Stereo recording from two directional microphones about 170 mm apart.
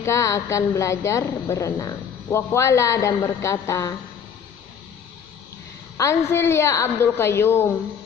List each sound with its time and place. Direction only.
0.0 s a woman's voice: 20° left (ahead or behind)
6.0 s a woman's voice: 15° left (ahead or behind)